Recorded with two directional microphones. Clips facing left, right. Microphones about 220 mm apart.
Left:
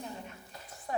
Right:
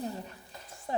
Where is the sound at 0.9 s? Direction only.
25° right (ahead or behind).